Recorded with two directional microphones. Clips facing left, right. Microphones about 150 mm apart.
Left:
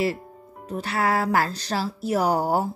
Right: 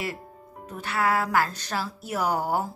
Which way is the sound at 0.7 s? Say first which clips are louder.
Left 2 dB; 35° left (ahead or behind).